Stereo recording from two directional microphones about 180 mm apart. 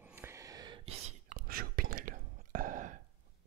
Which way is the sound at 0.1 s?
15° right (ahead or behind).